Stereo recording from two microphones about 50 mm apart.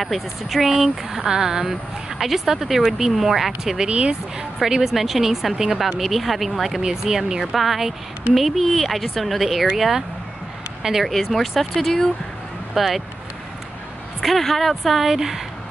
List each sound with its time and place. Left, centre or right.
0.0 s speech: centre
3.7 s speech: centre
14.2 s speech: centre